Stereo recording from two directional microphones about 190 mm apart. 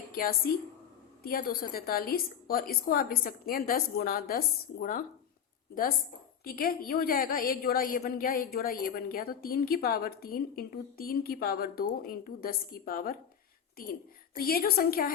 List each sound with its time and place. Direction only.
0.1 s a woman's voice: 50° left (ahead or behind)
6.4 s a woman's voice: 50° left (ahead or behind)
14.3 s a woman's voice: 50° left (ahead or behind)